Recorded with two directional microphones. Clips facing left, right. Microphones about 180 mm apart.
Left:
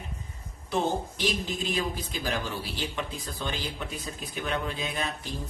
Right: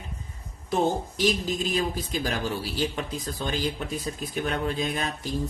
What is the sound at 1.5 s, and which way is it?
Speech, 40° right (ahead or behind).